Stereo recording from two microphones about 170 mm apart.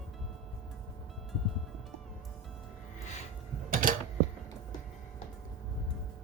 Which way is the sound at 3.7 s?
55° right (ahead or behind).